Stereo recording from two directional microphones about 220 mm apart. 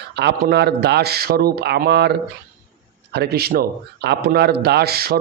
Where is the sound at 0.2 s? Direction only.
50° right (ahead or behind).